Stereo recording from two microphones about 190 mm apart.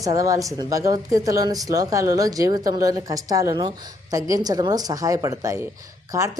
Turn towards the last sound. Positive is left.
turn(degrees=-15)  # may be behind; listen again after turning